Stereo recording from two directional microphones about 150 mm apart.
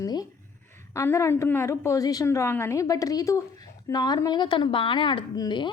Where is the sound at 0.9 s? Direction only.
20° left (ahead or behind).